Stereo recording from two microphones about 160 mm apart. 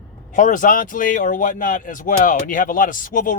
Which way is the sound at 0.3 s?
55° left (ahead or behind).